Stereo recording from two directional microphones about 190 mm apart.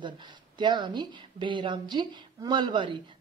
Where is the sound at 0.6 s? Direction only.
25° right (ahead or behind).